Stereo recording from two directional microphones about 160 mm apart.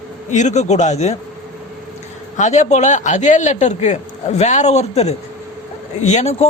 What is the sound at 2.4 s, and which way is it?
A man's voice, 45° left (ahead or behind).